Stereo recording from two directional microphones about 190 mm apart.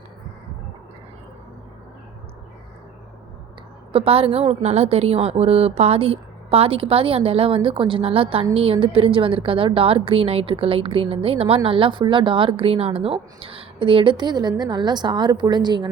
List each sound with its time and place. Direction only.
3.9 s a woman's voice: 30° right (ahead or behind)